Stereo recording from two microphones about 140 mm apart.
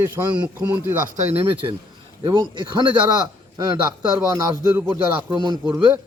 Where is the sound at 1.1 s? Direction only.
55° right (ahead or behind).